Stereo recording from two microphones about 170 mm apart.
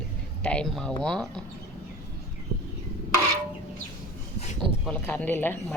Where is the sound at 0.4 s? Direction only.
5° left (ahead or behind).